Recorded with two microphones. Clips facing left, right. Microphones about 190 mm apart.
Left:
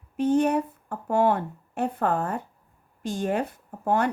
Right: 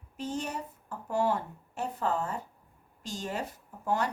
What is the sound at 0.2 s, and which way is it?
Speech, 60° left (ahead or behind).